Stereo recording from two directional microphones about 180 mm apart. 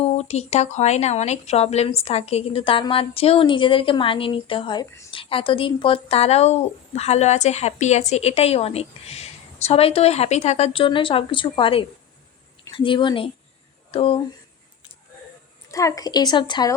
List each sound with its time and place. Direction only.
0.0 s a woman's voice: 35° left (ahead or behind)
15.7 s a woman's voice: 20° left (ahead or behind)